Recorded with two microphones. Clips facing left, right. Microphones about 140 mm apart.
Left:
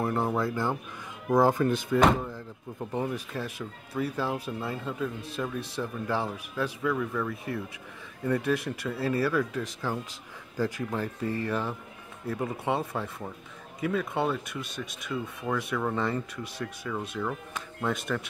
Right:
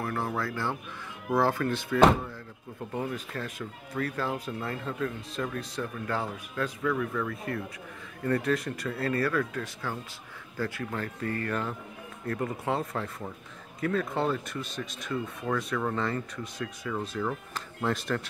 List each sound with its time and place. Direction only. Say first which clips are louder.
0.0 s speech: left 4 dB; 20° left (ahead or behind); by 18.2 s centre (ahead or behind)